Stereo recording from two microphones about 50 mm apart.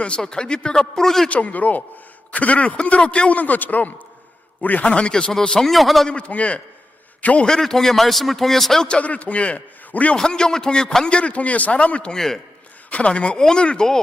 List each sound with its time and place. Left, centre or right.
0.0 s a man's voice: centre
1.3 s a man's voice: left
4.9 s a man's voice: left
5.4 s a man's voice: centre
6.1 s a man's voice: left
7.4 s a man's voice: centre
8.9 s a man's voice: left
10.2 s a man's voice: centre
12.1 s a man's voice: centre
12.9 s a man's voice: left